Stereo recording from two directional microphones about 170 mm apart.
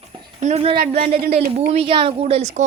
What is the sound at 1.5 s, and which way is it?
Speech, 40° right (ahead or behind).